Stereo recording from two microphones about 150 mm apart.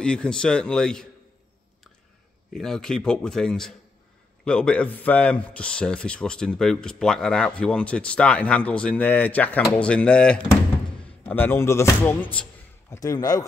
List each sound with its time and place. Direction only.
0.0 s speech: 5° left (ahead or behind)
2.5 s speech: 5° left (ahead or behind); by 13.5 s 25° left (ahead or behind)